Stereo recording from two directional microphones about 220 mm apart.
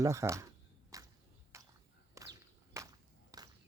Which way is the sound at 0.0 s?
15° right (ahead or behind).